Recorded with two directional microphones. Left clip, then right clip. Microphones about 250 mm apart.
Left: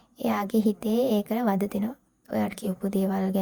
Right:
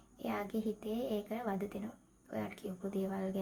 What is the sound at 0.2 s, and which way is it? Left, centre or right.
A woman's voice, left.